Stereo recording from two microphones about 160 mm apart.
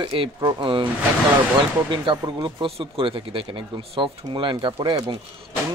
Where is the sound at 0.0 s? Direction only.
30° right (ahead or behind).